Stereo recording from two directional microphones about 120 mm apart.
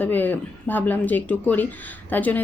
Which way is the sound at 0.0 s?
15° left (ahead or behind).